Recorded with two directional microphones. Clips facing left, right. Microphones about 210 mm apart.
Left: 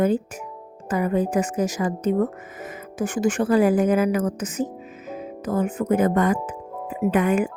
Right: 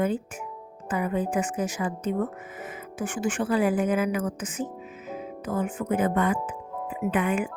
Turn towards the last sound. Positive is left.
turn(degrees=40)  # may be behind; listen again after turning